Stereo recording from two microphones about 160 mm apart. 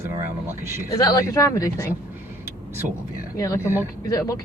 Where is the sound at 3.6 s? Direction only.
15° right (ahead or behind).